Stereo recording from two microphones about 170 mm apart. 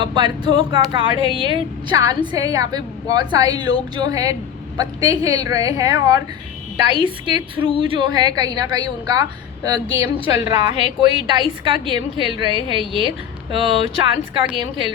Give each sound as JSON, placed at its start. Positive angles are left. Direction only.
{"t": 0.0, "sound": "a woman's voice", "side_deg": -25}
{"t": 10.3, "sound": "a woman's voice", "side_deg": -30}